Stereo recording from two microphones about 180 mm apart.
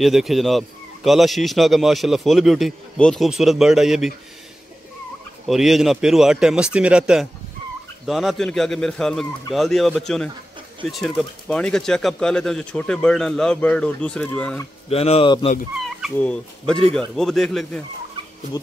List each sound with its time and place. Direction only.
0.0 s a man's voice: centre (ahead or behind)
5.5 s a man's voice: centre (ahead or behind)
14.9 s speech: 35° left (ahead or behind)
15.8 s a man's voice: 5° left (ahead or behind)